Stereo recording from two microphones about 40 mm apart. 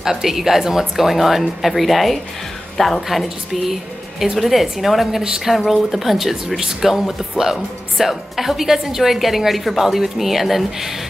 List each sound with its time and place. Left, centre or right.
0.0 s a woman's voice: centre